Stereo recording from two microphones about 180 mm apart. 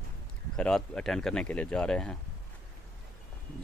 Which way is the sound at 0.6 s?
5° left (ahead or behind).